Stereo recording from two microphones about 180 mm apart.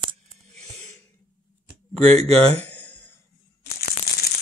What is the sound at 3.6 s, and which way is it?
Crushing, 60° left (ahead or behind).